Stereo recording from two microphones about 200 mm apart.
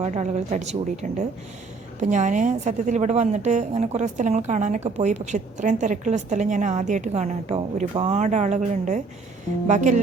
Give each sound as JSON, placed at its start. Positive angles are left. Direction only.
{"t": 0.0, "sound": "a woman's voice", "side_deg": -35}